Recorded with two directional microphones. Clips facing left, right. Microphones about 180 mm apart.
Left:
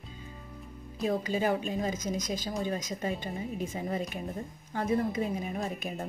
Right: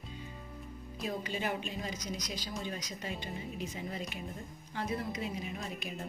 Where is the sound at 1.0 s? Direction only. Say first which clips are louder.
Left 8 dB; 40° left (ahead or behind).